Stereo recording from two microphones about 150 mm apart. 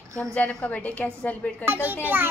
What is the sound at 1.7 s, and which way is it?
Speech, 15° right (ahead or behind).